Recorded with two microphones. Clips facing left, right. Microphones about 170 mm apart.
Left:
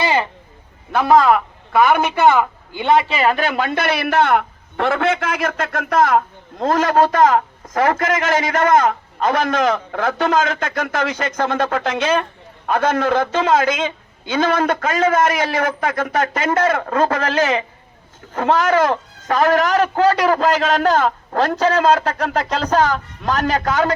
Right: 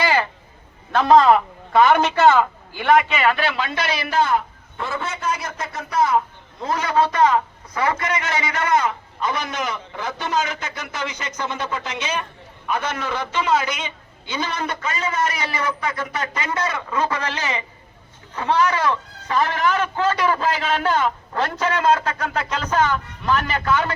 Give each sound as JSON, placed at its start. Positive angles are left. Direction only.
{"t": 0.0, "sound": "a sound", "side_deg": 20}
{"t": 0.9, "sound": "a man's voice", "side_deg": 5}
{"t": 7.3, "sound": "a man's voice", "side_deg": 45}
{"t": 9.4, "sound": "a man's voice", "side_deg": 90}
{"t": 11.5, "sound": "speech", "side_deg": 90}
{"t": 11.9, "sound": "a man's voice", "side_deg": 55}
{"t": 15.3, "sound": "a man's voice", "side_deg": 50}